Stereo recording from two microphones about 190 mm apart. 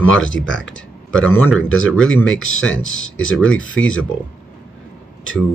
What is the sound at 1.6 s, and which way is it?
Speech, 90° left.